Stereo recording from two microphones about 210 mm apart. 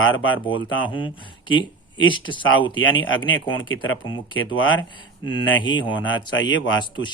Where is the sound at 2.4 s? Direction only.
65° left (ahead or behind).